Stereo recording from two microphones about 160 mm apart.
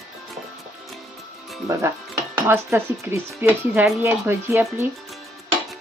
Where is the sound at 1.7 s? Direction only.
20° right (ahead or behind).